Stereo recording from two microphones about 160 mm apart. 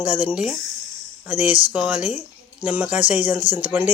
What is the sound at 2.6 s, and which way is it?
Speech, 10° right (ahead or behind).